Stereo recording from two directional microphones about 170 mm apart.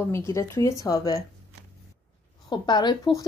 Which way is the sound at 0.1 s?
15° left (ahead or behind).